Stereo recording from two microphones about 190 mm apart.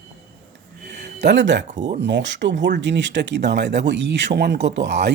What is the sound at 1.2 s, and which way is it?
Speech, 70° right (ahead or behind).